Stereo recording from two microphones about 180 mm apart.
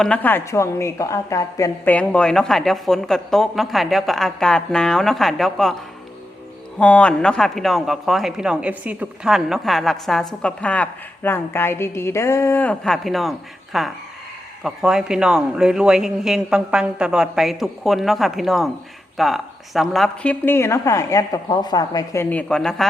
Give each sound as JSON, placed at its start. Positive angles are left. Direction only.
{"t": 0.0, "sound": "speech", "side_deg": 10}
{"t": 6.7, "sound": "speech", "side_deg": 5}
{"t": 20.4, "sound": "a woman's voice", "side_deg": 15}